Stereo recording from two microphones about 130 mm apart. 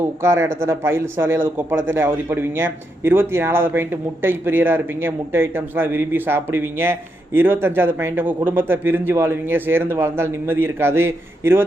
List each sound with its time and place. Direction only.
0.0 s a man's voice: 20° right (ahead or behind)